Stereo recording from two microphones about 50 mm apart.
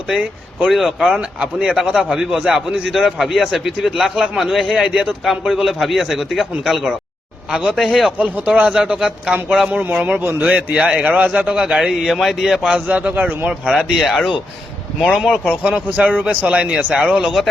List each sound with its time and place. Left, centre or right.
0.1 s a man's voice: centre
0.7 s a man's voice: centre
4.7 s a man's voice: centre
8.2 s a man's voice: right
9.9 s a man's voice: right
11.7 s a man's voice: centre
12.7 s speech: right
14.0 s a man's voice: centre
15.6 s a man's voice: centre
16.9 s a man's voice: centre